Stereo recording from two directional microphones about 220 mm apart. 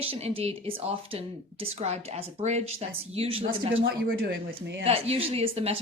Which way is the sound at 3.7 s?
50° right (ahead or behind).